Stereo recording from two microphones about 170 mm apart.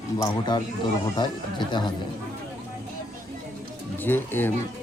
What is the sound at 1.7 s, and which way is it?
Speech, 25° left (ahead or behind).